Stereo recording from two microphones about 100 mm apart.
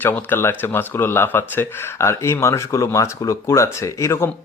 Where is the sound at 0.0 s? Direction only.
20° left (ahead or behind).